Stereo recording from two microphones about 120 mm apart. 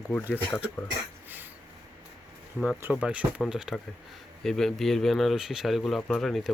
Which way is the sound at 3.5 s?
5° right (ahead or behind).